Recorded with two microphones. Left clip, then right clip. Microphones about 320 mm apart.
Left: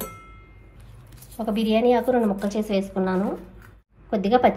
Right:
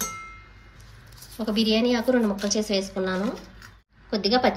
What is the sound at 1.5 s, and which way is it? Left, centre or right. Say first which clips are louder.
A woman's voice: left 3 dB; centre.